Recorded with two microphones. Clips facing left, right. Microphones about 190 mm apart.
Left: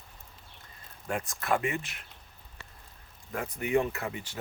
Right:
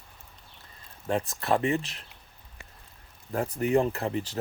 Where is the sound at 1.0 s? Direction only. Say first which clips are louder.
Right 4 dB; 30° right (ahead or behind).